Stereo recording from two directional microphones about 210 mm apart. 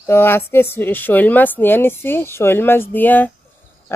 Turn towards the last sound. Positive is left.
turn(degrees=10)  # may be behind; listen again after turning